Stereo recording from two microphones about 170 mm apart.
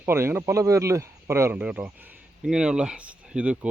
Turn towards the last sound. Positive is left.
turn(degrees=-5)  # may be behind; listen again after turning